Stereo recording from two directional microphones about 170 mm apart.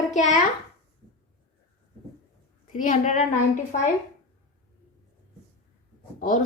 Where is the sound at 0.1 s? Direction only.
45° left (ahead or behind).